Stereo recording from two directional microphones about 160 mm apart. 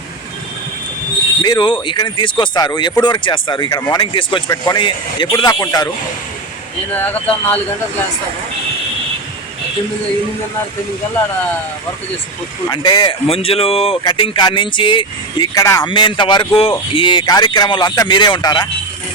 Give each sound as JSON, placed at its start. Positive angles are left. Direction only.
{"t": 1.4, "sound": "speech", "side_deg": 25}
{"t": 6.9, "sound": "speech", "side_deg": 10}
{"t": 12.7, "sound": "speech", "side_deg": 25}